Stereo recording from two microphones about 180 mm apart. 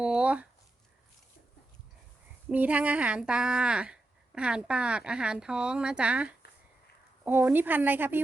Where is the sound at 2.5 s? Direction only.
10° right (ahead or behind).